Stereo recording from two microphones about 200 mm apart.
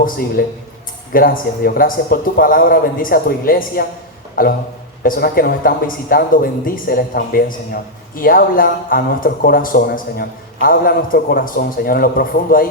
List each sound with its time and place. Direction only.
0.4 s speech: 45° left (ahead or behind)